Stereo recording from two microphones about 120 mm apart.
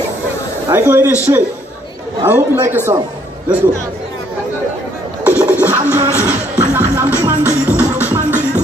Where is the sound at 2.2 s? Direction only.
20° right (ahead or behind).